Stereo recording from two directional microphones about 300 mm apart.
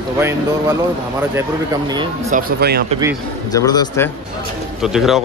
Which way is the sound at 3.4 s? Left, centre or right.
Centre.